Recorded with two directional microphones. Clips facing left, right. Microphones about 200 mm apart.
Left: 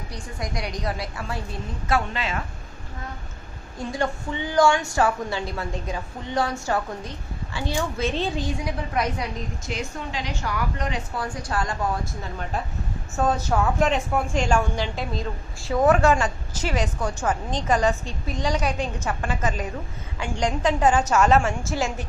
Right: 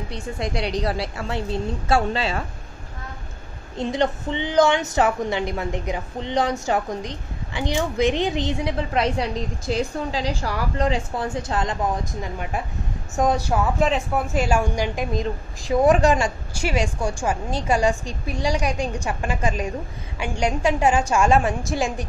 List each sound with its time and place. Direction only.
0.1 s a woman's voice: 25° right (ahead or behind)
3.7 s a woman's voice: 25° right (ahead or behind)
13.7 s a woman's voice: centre (ahead or behind)